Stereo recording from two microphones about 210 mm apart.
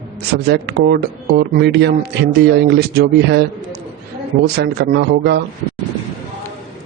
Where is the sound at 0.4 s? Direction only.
55° right (ahead or behind).